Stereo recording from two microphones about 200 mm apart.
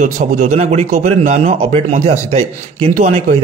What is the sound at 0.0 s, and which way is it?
A man's voice, 40° right (ahead or behind).